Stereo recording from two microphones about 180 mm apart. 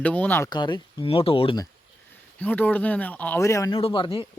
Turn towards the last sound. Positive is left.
turn(degrees=30)  # may be behind; listen again after turning